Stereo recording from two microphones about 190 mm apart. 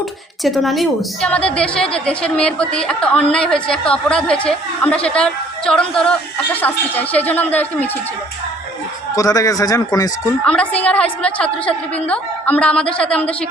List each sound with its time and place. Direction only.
0.4 s a woman's voice: centre (ahead or behind)
9.1 s a woman's voice: 20° left (ahead or behind)
10.4 s a woman's voice: 5° left (ahead or behind)